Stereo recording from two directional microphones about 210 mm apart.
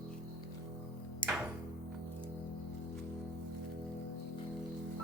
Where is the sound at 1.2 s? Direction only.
20° left (ahead or behind).